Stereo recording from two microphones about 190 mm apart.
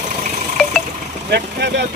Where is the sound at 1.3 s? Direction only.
60° right (ahead or behind).